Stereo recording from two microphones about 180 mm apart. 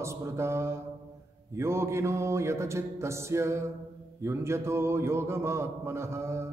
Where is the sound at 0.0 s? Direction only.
15° right (ahead or behind).